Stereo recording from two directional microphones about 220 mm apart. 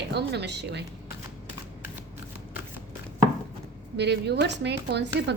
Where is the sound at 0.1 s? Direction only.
50° right (ahead or behind).